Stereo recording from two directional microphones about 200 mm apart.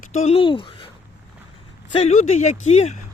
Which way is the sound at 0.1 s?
35° left (ahead or behind).